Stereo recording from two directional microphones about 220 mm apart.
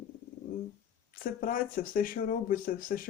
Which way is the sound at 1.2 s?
40° left (ahead or behind).